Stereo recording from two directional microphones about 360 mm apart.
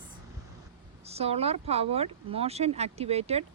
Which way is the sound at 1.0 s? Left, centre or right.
Centre.